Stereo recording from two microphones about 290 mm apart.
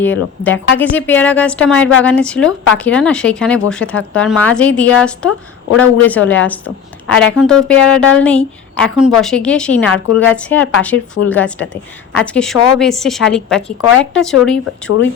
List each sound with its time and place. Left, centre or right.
0.0 s a woman's voice: centre